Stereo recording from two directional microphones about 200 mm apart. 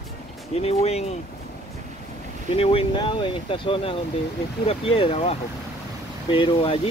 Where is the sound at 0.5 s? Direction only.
30° left (ahead or behind).